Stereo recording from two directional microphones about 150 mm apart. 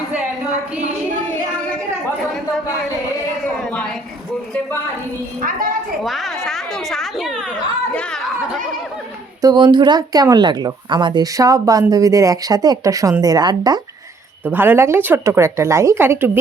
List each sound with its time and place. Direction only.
6.0 s a woman's voice: centre (ahead or behind)
9.4 s speech: 30° right (ahead or behind)
14.4 s speech: 15° right (ahead or behind)